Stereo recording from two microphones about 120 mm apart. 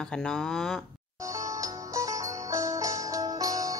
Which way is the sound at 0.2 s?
5° left (ahead or behind).